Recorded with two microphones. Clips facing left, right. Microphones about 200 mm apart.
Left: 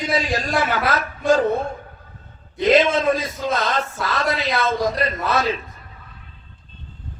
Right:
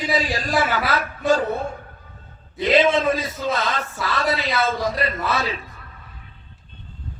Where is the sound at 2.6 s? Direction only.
45° left (ahead or behind).